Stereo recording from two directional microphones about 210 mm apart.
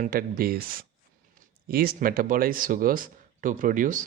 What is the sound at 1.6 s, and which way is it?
Speech, 45° right (ahead or behind).